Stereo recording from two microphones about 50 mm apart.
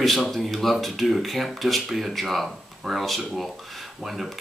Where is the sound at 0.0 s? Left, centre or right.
Centre.